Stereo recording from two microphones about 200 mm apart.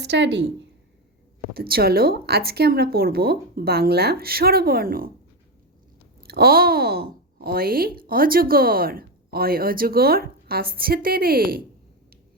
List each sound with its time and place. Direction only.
0.0 s a woman's voice: 60° right (ahead or behind)
1.5 s speech: 50° right (ahead or behind)
6.2 s speech: 50° right (ahead or behind)